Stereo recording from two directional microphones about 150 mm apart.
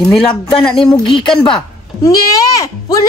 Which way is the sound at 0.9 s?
35° left (ahead or behind).